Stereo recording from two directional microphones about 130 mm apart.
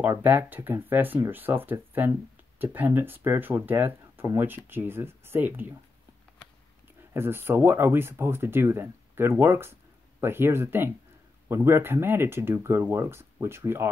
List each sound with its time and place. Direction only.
0.0 s speech: 15° right (ahead or behind)
7.2 s speech: 15° right (ahead or behind)